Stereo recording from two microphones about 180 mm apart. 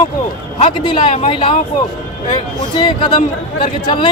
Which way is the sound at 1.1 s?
40° left (ahead or behind).